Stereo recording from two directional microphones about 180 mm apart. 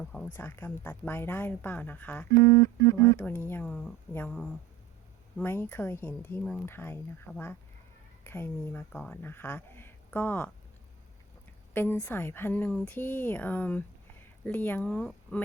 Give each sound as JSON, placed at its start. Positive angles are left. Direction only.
{"t": 0.0, "sound": "speech", "side_deg": 5}
{"t": 11.7, "sound": "speech", "side_deg": 10}